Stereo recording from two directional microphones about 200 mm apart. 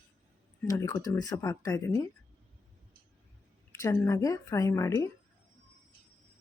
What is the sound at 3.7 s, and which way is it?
Speech, 15° left (ahead or behind).